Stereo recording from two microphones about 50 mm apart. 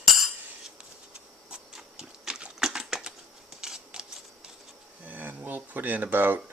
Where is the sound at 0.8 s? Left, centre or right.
Centre.